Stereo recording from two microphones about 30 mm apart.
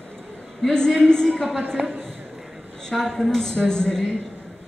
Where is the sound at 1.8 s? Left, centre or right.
Right.